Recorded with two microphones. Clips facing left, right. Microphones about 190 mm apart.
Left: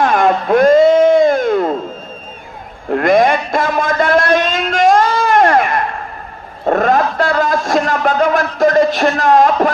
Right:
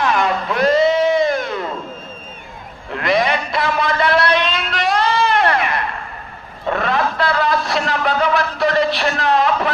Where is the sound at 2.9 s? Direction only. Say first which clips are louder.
Left 7 dB; 50° left (ahead or behind).